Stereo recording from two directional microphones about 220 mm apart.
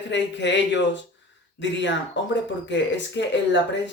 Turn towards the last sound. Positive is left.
turn(degrees=55)  # may be behind; listen again after turning